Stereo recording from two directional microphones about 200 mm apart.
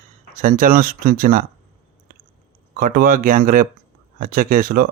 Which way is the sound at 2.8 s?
45° right (ahead or behind).